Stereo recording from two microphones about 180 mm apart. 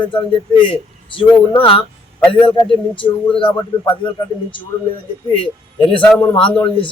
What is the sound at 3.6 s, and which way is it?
Speech, 25° left (ahead or behind).